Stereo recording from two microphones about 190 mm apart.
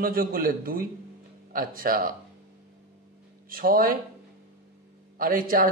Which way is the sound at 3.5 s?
50° right (ahead or behind).